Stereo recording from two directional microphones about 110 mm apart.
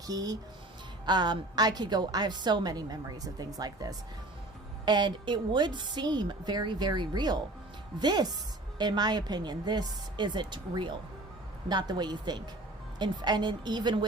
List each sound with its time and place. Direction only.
0.1 s a woman's voice: 35° right (ahead or behind)